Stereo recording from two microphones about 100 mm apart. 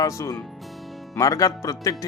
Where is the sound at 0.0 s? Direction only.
35° left (ahead or behind).